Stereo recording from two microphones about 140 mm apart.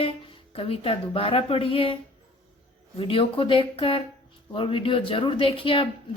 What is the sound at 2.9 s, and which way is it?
A woman's voice, 40° left (ahead or behind).